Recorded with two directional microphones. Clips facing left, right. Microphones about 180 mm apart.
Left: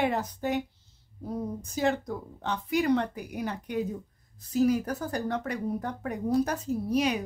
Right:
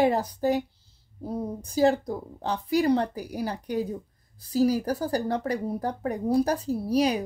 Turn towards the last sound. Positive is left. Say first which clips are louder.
# right 3 dB
turn(degrees=-35)  # may be behind; listen again after turning